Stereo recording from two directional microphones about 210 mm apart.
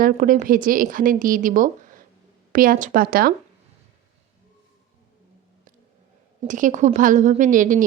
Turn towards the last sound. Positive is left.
turn(degrees=-40)  # may be behind; listen again after turning